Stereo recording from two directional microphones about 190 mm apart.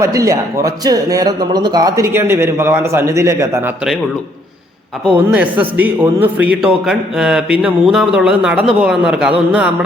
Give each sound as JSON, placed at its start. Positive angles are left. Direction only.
{"t": 0.0, "sound": "speech", "side_deg": -15}
{"t": 5.1, "sound": "a man's voice", "side_deg": -10}